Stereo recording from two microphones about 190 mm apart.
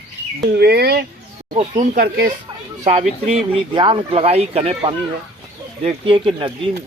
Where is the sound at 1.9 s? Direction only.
55° right (ahead or behind).